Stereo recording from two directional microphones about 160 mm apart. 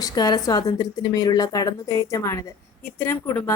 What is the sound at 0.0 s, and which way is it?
A woman's voice, 25° left (ahead or behind).